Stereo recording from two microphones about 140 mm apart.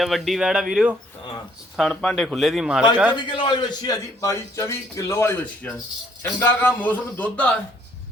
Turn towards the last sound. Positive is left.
turn(degrees=10)  # may be behind; listen again after turning